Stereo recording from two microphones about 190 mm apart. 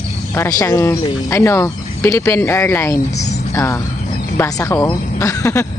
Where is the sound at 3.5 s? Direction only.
15° left (ahead or behind).